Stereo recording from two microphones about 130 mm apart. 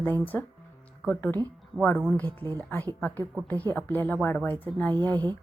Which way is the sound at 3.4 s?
15° left (ahead or behind).